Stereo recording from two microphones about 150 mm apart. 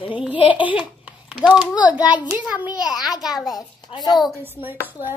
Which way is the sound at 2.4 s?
10° right (ahead or behind).